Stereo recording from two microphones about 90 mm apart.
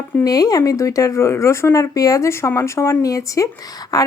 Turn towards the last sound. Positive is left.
turn(degrees=45)  # may be behind; listen again after turning